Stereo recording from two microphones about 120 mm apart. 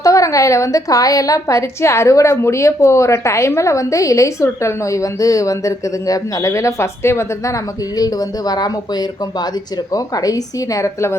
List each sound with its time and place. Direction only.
0.0 s a woman's voice: 25° left (ahead or behind)